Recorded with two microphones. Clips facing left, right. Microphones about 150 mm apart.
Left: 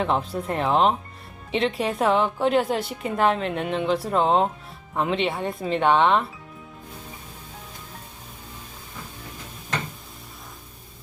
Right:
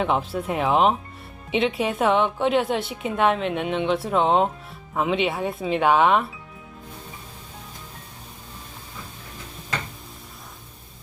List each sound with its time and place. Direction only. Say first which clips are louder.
0.0 s a woman's voice: right 1 dB; centre (ahead or behind)